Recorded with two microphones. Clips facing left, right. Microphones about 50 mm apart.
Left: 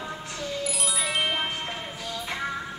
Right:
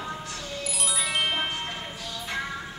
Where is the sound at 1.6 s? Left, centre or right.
Left.